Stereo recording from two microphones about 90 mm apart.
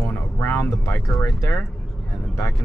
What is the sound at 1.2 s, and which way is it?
Speech, 35° left (ahead or behind).